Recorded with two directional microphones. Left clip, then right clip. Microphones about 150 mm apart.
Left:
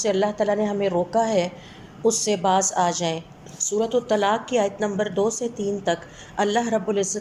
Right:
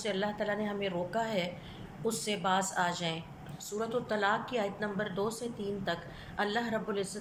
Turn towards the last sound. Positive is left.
turn(degrees=35)  # may be behind; listen again after turning